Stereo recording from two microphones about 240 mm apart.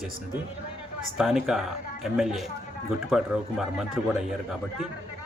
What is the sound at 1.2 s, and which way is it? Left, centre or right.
Speech, centre.